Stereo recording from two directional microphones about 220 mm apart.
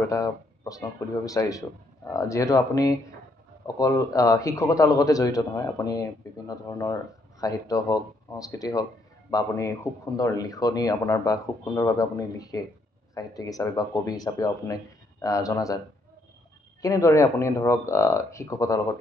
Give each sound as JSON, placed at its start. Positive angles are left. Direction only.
{"t": 0.1, "sound": "a man's voice", "side_deg": 15}
{"t": 16.8, "sound": "a man's voice", "side_deg": 15}